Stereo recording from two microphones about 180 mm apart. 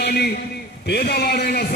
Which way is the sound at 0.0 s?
60° left (ahead or behind).